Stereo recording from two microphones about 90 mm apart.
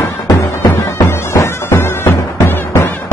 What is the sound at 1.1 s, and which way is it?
Music, 30° left (ahead or behind).